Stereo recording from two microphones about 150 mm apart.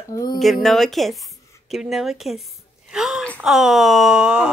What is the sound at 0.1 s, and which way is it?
Speech, 25° left (ahead or behind).